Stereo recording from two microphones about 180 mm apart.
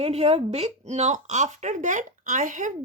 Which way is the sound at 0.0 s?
35° right (ahead or behind).